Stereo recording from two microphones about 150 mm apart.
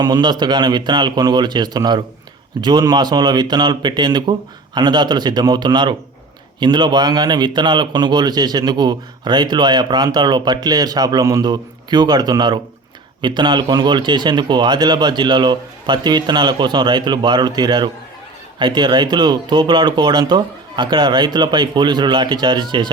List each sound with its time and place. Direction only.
0.0 s a man's voice: 25° right (ahead or behind)